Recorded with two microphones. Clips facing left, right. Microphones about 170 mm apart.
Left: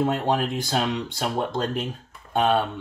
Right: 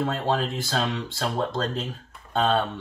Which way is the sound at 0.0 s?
15° left (ahead or behind).